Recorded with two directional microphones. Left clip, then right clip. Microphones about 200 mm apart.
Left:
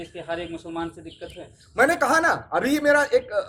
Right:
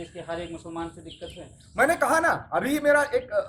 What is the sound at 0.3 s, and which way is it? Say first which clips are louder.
Speech: left 4 dB; 30° left (ahead or behind).